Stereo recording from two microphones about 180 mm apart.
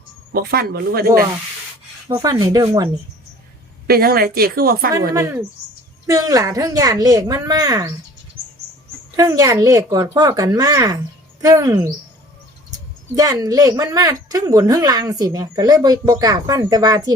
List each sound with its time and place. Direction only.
0.3 s speech: 60° right (ahead or behind)
2.0 s speech: 20° right (ahead or behind)
3.8 s speech: 55° right (ahead or behind)
5.1 s speech: 15° right (ahead or behind)
9.1 s speech: 20° right (ahead or behind)
13.1 s speech: 20° right (ahead or behind)